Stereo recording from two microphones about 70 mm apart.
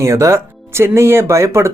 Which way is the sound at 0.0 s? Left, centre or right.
Right.